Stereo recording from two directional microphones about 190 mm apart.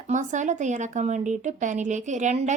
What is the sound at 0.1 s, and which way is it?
A woman's voice, 40° right (ahead or behind).